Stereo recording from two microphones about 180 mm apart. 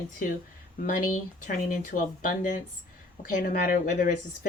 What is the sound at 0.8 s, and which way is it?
Speech, 50° left (ahead or behind).